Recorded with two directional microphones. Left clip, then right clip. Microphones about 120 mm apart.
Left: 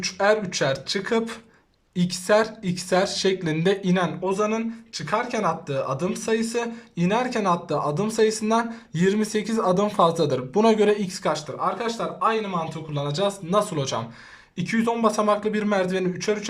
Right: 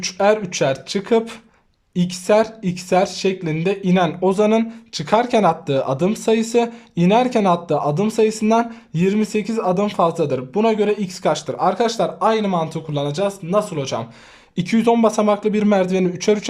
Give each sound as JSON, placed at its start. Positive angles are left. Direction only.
{"t": 0.0, "sound": "speech", "side_deg": -20}
{"t": 3.9, "sound": "speech", "side_deg": -25}
{"t": 11.5, "sound": "speech", "side_deg": -40}
{"t": 14.5, "sound": "speech", "side_deg": -30}